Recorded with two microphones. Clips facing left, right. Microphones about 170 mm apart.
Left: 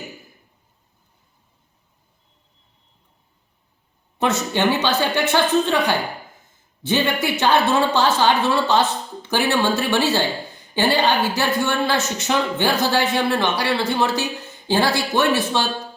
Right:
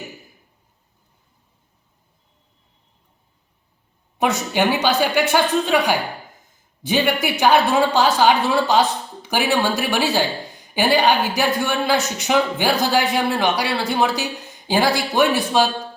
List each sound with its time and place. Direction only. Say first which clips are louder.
4.2 s a woman's voice: right 1 dB; 10° right (ahead or behind)